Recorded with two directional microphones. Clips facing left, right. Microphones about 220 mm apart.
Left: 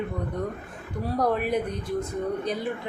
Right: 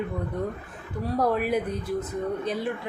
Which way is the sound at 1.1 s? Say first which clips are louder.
Even; 5° right (ahead or behind).